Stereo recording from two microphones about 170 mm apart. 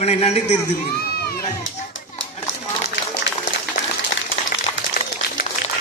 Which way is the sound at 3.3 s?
90° left.